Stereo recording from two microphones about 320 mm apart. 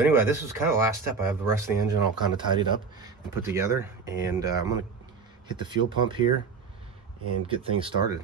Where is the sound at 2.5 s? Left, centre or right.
Centre.